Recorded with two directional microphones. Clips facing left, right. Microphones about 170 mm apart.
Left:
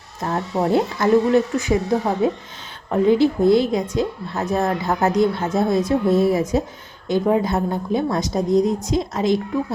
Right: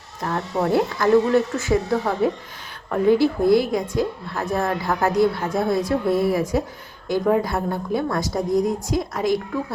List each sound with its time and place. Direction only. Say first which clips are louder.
0.2 s a woman's voice: left 2 dB; 25° left (ahead or behind)